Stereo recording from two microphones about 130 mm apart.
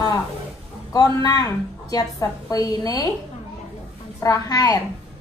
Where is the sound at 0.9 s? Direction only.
30° left (ahead or behind).